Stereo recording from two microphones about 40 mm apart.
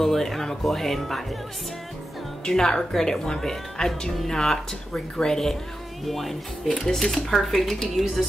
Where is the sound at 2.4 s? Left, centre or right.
Centre.